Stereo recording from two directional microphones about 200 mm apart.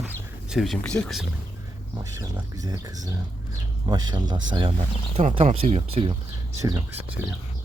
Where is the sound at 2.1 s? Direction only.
15° right (ahead or behind).